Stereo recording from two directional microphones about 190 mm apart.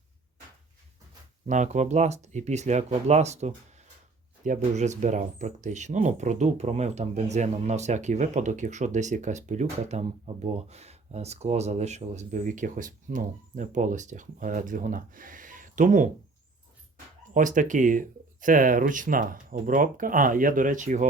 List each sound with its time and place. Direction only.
1.5 s speech: 40° right (ahead or behind)
17.3 s speech: 45° right (ahead or behind)